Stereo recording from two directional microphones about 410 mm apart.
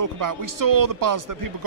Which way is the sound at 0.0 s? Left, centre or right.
Right.